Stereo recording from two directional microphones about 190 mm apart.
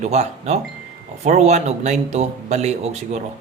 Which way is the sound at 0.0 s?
35° right (ahead or behind).